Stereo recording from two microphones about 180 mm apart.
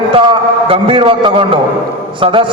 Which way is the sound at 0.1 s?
30° right (ahead or behind).